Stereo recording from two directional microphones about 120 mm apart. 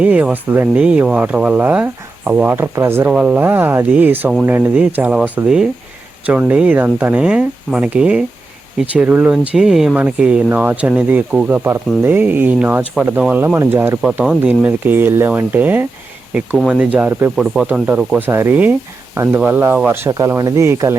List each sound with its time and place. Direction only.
0.0 s speech: 10° right (ahead or behind)
3.1 s speech: 10° right (ahead or behind)
17.3 s speech: 5° right (ahead or behind)
18.2 s speech: 20° right (ahead or behind)